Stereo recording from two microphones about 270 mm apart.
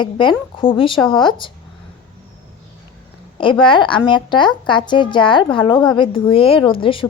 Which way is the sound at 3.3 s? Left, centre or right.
Centre.